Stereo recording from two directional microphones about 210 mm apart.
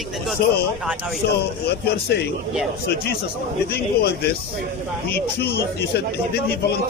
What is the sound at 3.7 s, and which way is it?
Speech, 50° left (ahead or behind).